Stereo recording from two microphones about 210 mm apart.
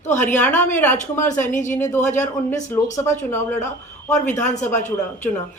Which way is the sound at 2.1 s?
35° left (ahead or behind).